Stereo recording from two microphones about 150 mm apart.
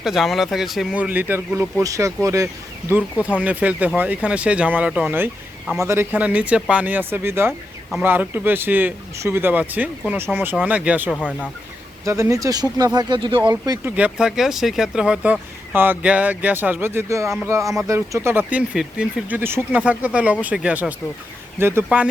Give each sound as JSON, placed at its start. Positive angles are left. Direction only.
{"t": 0.0, "sound": "speech", "side_deg": 0}
{"t": 3.4, "sound": "speech", "side_deg": -10}
{"t": 12.0, "sound": "speech", "side_deg": -20}
{"t": 13.9, "sound": "speech", "side_deg": -5}